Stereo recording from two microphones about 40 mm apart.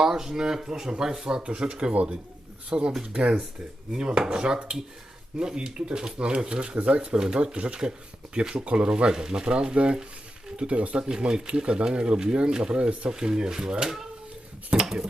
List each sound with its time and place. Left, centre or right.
0.0 s speech: centre
1.4 s speech: right
7.2 s speech: centre
10.9 s speech: centre